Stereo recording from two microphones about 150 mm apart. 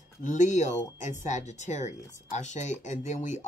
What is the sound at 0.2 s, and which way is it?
Speech, 55° left (ahead or behind).